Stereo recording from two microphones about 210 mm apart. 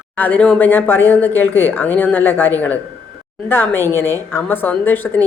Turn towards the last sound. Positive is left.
turn(degrees=10)  # may be behind; listen again after turning